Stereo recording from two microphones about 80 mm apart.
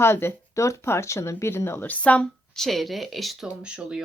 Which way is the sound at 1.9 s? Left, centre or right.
Centre.